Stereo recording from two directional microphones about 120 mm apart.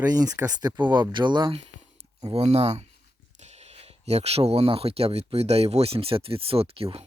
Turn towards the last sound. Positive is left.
turn(degrees=-55)  # may be behind; listen again after turning